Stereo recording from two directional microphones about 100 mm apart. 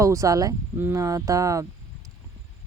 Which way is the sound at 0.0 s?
30° right (ahead or behind).